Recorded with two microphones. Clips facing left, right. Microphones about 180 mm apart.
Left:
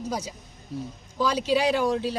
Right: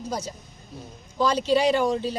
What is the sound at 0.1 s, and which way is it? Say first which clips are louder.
A woman's voice: even; 10° left (ahead or behind).